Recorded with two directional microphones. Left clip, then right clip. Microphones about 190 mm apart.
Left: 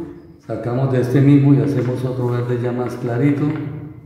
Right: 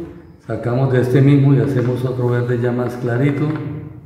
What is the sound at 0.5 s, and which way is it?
Speech, 15° right (ahead or behind).